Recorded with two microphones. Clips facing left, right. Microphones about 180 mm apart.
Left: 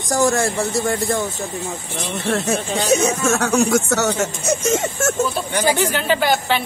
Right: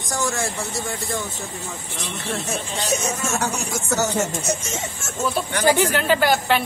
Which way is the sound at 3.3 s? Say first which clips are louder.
Left 9 dB; 90° left.